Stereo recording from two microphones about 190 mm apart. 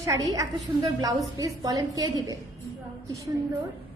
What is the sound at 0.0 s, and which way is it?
A woman's voice, 20° right (ahead or behind).